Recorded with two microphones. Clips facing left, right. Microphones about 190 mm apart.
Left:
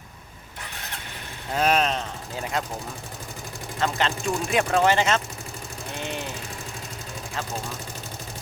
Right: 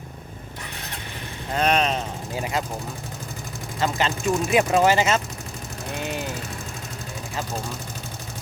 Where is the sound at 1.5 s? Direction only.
5° left (ahead or behind).